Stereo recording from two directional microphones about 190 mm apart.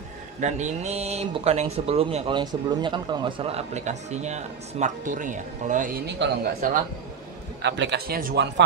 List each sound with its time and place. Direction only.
0.4 s speech: 40° right (ahead or behind); by 6.3 s 65° right (ahead or behind)
6.6 s a man's voice: 45° right (ahead or behind)
7.6 s speech: 65° right (ahead or behind); by 8.5 s 50° right (ahead or behind)